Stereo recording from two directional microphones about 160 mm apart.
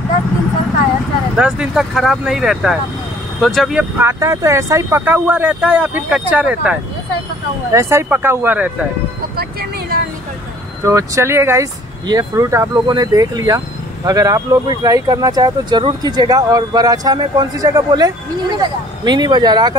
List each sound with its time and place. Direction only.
1.3 s speech: 5° right (ahead or behind)
3.9 s speech: 15° right (ahead or behind)
9.4 s vehicle: 75° right (ahead or behind)
10.9 s speech: 20° right (ahead or behind)